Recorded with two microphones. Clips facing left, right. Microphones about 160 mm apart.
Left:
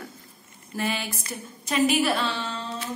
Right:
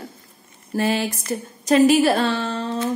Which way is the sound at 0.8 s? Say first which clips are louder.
Right 8 dB; 40° right (ahead or behind).